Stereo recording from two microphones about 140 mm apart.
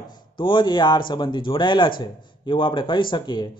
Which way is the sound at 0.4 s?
35° left (ahead or behind).